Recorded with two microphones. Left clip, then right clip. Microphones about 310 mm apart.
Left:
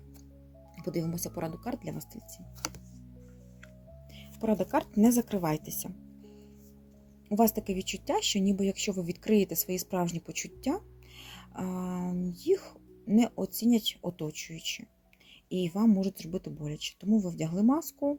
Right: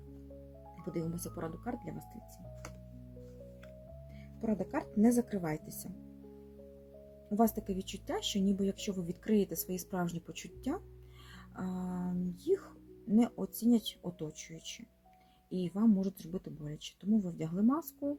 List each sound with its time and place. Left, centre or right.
0.9 s speech: left
4.4 s speech: left
7.3 s speech: centre
11.3 s a sound: left
12.5 s speech: left